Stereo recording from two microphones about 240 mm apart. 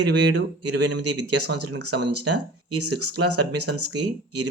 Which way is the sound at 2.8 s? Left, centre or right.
Right.